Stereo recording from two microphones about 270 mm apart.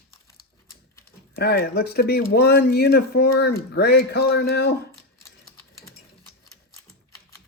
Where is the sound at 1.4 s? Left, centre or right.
Left.